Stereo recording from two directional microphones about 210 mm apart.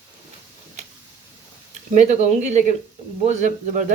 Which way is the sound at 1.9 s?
35° right (ahead or behind).